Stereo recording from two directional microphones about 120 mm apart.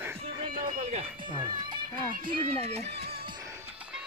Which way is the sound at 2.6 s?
65° right (ahead or behind).